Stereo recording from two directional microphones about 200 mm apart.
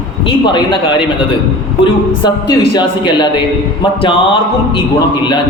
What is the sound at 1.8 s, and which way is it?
A man's voice, 20° left (ahead or behind).